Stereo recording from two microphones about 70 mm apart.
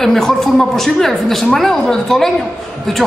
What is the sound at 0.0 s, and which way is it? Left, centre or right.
A man's voice, centre.